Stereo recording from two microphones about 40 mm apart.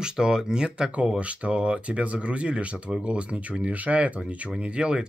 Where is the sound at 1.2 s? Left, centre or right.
Right.